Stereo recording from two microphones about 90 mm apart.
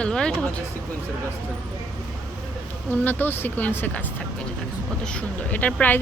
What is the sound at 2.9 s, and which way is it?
Speech, 20° left (ahead or behind).